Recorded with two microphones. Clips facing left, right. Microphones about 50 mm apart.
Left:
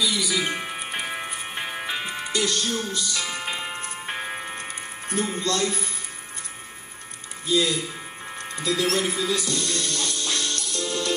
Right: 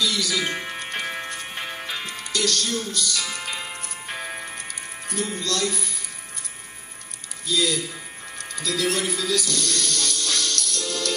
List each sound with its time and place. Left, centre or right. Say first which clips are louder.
0.0 s music: even; centre; by 5.9 s left
7.4 s speech: left 1 dB; left
8.4 s music: left 1 dB; left